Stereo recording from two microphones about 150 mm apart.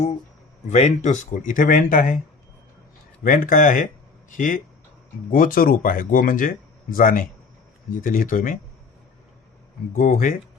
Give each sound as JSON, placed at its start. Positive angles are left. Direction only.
{"t": 0.7, "sound": "speech", "side_deg": 50}
{"t": 3.2, "sound": "speech", "side_deg": 65}
{"t": 9.9, "sound": "speech", "side_deg": 60}